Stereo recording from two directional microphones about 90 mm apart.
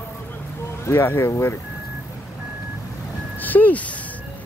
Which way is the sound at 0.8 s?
25° left (ahead or behind).